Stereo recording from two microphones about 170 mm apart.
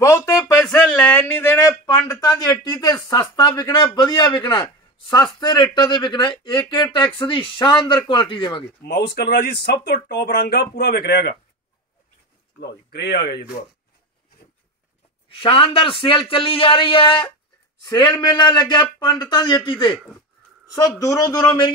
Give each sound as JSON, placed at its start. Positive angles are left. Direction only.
{"t": 0.0, "sound": "a sound", "side_deg": 15}
{"t": 0.6, "sound": "a sound", "side_deg": 5}
{"t": 2.6, "sound": "a man's voice", "side_deg": 25}
{"t": 8.8, "sound": "speech", "side_deg": 65}
{"t": 12.5, "sound": "speech", "side_deg": 75}
{"t": 15.4, "sound": "a man's voice", "side_deg": 30}
{"t": 21.0, "sound": "a man's voice", "side_deg": 20}